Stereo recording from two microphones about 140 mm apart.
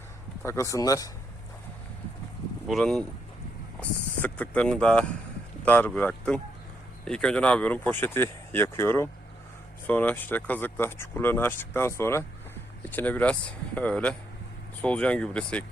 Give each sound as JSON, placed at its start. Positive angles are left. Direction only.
{"t": 0.4, "sound": "speech", "side_deg": 20}
{"t": 2.6, "sound": "speech", "side_deg": 0}